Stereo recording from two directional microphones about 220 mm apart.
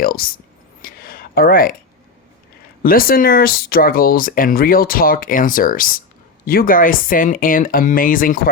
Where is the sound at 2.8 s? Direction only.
40° left (ahead or behind).